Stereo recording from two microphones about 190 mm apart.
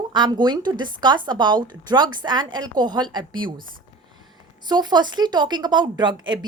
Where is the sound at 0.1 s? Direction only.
25° right (ahead or behind).